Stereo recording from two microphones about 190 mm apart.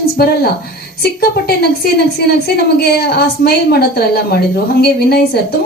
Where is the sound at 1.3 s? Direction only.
55° left (ahead or behind).